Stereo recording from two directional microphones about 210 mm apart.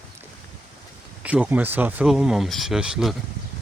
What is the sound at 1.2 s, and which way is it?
A man's voice, 5° right (ahead or behind).